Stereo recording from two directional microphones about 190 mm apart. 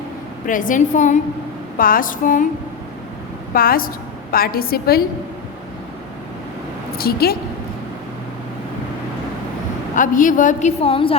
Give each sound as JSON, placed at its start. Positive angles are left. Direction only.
{"t": 0.4, "sound": "a woman's voice", "side_deg": 45}
{"t": 3.5, "sound": "a woman's voice", "side_deg": 50}
{"t": 7.0, "sound": "a woman's voice", "side_deg": 55}
{"t": 9.9, "sound": "a woman's voice", "side_deg": 45}